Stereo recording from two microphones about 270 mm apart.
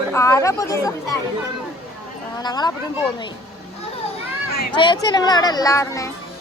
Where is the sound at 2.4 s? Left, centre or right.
Centre.